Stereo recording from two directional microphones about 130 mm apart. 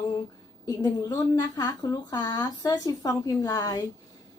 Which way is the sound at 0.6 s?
25° left (ahead or behind).